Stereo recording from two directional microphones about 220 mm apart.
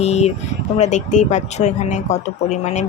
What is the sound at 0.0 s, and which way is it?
Speech, 30° left (ahead or behind).